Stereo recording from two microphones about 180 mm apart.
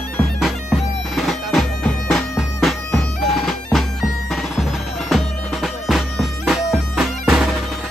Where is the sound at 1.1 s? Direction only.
Centre (ahead or behind).